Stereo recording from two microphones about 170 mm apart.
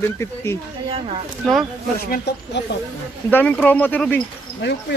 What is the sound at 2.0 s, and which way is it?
Speech, 60° left (ahead or behind).